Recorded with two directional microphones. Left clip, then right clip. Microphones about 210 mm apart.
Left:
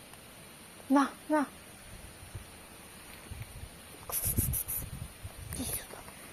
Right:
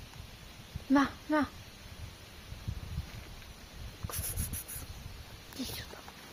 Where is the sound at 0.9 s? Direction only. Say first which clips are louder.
Left 1 dB; 10° right (ahead or behind).